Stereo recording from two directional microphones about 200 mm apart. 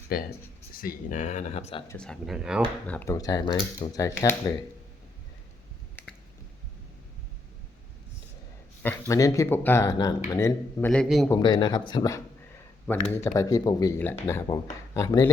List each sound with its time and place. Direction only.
0.1 s speech: 50° left (ahead or behind); by 1.8 s 35° left (ahead or behind)
2.0 s speech: centre (ahead or behind)
2.8 s speech: 10° left (ahead or behind)
8.8 s speech: 10° left (ahead or behind)